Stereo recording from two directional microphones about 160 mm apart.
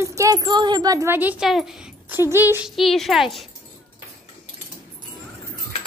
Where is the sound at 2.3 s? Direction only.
15° right (ahead or behind).